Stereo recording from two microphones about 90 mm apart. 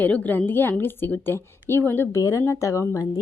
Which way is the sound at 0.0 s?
20° left (ahead or behind).